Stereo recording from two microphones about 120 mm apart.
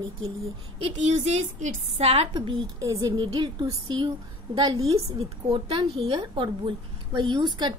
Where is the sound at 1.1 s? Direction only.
70° right (ahead or behind).